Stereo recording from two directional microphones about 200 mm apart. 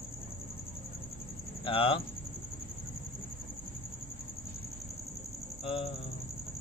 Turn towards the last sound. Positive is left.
turn(degrees=30)  # may be behind; listen again after turning